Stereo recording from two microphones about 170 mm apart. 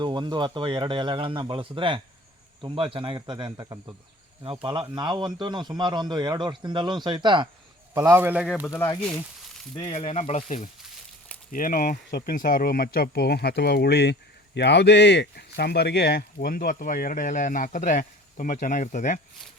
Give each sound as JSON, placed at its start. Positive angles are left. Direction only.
{"t": 0.0, "sound": "a man's voice", "side_deg": -25}
{"t": 7.9, "sound": "speech", "side_deg": -15}
{"t": 8.6, "sound": "speech", "side_deg": 15}
{"t": 9.7, "sound": "speech", "side_deg": 35}